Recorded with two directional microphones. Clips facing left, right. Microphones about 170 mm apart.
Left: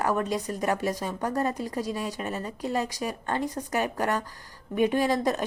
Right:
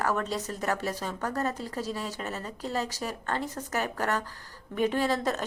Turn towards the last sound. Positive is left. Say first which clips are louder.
# left 3 dB
turn(degrees=15)  # may be behind; listen again after turning